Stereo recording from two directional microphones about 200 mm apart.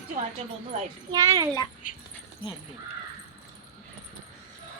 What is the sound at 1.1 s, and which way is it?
Speech, 20° right (ahead or behind).